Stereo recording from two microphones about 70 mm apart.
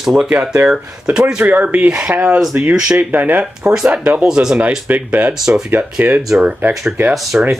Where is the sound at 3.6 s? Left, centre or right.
Centre.